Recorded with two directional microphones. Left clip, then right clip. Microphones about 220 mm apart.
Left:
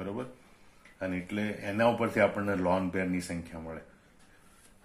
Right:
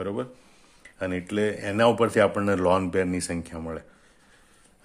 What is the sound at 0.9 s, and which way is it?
Speech, 50° right (ahead or behind).